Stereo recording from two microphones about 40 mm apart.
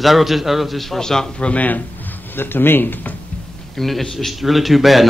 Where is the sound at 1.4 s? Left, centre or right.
Left.